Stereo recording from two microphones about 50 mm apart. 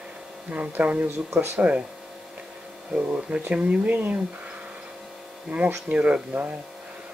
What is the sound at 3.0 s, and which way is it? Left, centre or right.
Speech, right.